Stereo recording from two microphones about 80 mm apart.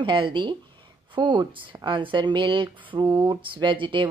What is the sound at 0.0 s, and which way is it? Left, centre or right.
Speech, right.